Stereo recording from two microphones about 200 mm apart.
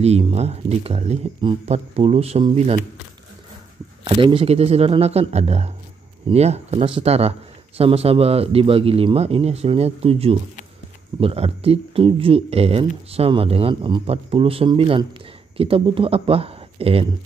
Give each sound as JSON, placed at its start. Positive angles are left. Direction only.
{"t": 0.0, "sound": "speech", "side_deg": -30}
{"t": 4.0, "sound": "speech", "side_deg": -25}